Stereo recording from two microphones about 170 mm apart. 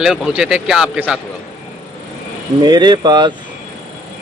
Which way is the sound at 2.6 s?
25° right (ahead or behind).